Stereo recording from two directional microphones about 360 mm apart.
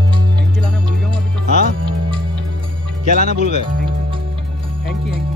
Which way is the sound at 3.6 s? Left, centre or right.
Centre.